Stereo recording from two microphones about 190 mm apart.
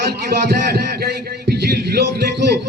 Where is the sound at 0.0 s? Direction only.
55° right (ahead or behind).